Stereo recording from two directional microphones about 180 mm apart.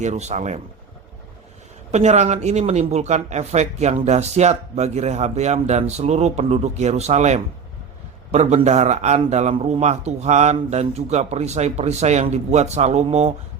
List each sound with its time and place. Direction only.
0.0 s speech: 40° right (ahead or behind)
1.9 s speech: 40° right (ahead or behind)